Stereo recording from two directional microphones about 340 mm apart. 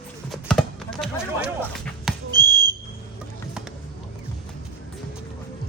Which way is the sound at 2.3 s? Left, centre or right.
Centre.